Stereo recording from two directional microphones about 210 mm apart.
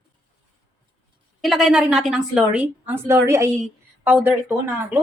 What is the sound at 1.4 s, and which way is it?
A woman's voice, centre (ahead or behind).